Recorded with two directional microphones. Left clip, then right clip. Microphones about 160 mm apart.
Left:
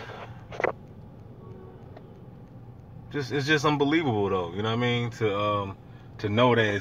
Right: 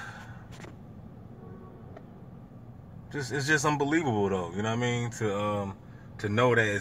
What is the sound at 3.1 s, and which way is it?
Speech, 5° left (ahead or behind).